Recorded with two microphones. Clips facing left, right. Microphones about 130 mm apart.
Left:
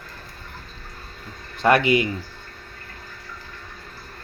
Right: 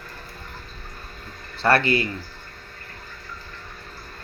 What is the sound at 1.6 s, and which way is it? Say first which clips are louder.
Speech: left 3 dB; 15° left (ahead or behind).